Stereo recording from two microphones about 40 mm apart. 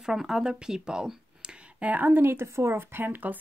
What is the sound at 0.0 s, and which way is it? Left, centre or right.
Speech, centre.